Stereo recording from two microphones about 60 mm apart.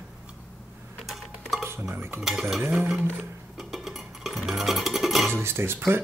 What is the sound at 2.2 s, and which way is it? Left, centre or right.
Dishes, centre.